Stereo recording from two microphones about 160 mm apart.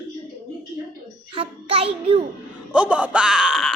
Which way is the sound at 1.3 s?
35° right (ahead or behind).